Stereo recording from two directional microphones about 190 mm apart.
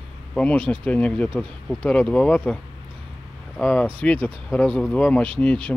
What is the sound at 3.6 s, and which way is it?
Speech, 5° left (ahead or behind).